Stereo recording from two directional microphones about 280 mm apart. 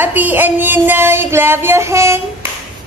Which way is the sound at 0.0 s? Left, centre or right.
Centre.